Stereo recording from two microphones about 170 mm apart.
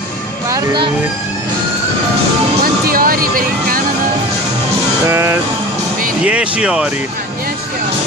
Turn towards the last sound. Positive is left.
turn(degrees=-5)  # may be behind; listen again after turning